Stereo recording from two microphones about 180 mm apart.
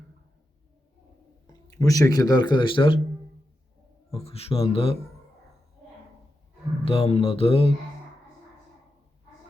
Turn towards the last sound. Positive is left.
turn(degrees=30)  # may be behind; listen again after turning